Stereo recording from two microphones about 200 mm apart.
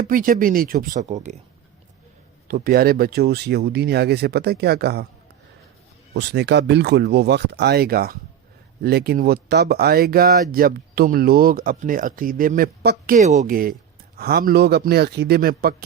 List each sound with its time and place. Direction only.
0.0 s speech: 45° right (ahead or behind)
2.5 s speech: 50° right (ahead or behind)
6.1 s speech: 55° right (ahead or behind)
13.1 s speech: 35° right (ahead or behind)